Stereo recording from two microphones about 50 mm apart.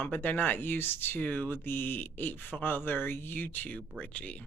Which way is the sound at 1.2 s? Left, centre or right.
Left.